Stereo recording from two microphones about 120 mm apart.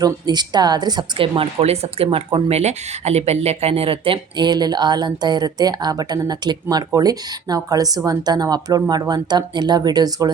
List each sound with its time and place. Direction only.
0.0 s a woman's voice: 35° right (ahead or behind)